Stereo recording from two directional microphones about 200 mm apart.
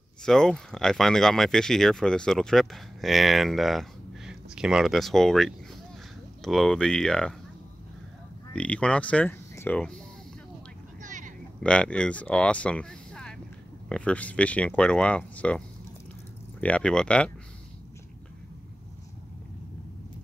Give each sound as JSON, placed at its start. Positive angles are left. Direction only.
{"t": 0.2, "sound": "speech", "side_deg": 5}
{"t": 8.5, "sound": "speech", "side_deg": 5}
{"t": 11.0, "sound": "vehicle", "side_deg": -40}
{"t": 11.6, "sound": "speech", "side_deg": 5}
{"t": 16.6, "sound": "speech", "side_deg": 5}